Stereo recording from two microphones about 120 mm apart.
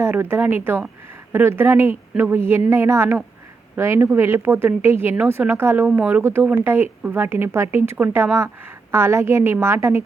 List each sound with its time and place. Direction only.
0.0 s speech: 20° right (ahead or behind)